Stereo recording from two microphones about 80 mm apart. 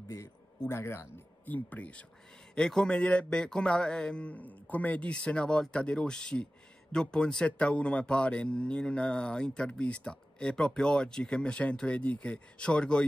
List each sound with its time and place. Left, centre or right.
0.7 s speech: left
1.4 s speech: left